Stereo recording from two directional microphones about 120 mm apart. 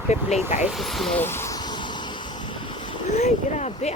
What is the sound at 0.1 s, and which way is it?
Speech, 70° left (ahead or behind).